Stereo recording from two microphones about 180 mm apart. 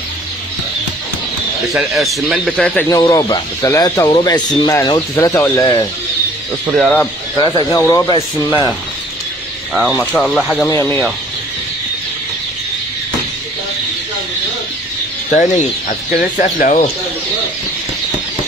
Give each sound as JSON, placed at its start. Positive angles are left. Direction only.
{"t": 1.7, "sound": "speech", "side_deg": 0}
{"t": 2.9, "sound": "speech", "side_deg": 20}
{"t": 6.7, "sound": "speech", "side_deg": 5}
{"t": 7.3, "sound": "speech", "side_deg": 20}
{"t": 9.9, "sound": "speech", "side_deg": 5}
{"t": 16.2, "sound": "speech", "side_deg": 50}